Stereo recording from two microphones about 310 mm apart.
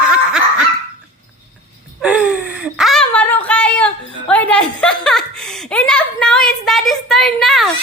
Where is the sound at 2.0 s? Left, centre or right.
Centre.